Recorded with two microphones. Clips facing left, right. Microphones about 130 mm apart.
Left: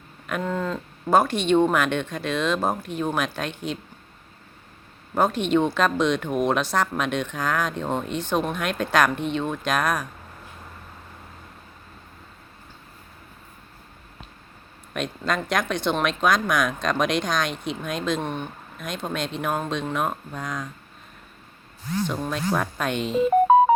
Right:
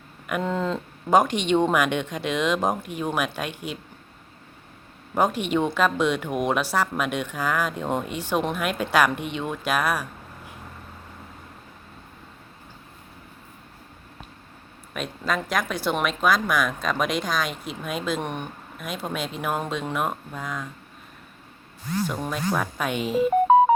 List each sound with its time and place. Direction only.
0.3 s speech: 15° right (ahead or behind)
5.1 s speech: 10° right (ahead or behind)
14.9 s speech: 5° right (ahead or behind)
22.3 s speech: 5° right (ahead or behind)